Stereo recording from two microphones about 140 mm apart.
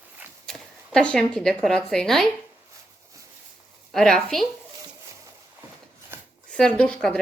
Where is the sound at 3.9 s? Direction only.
5° left (ahead or behind).